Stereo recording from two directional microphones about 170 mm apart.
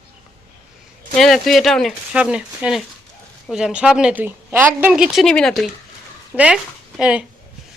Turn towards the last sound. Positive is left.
turn(degrees=-5)  # may be behind; listen again after turning